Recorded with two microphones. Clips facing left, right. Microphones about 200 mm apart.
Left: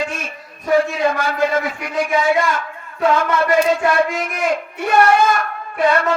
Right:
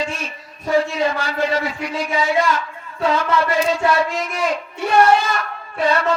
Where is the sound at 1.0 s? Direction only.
50° left (ahead or behind).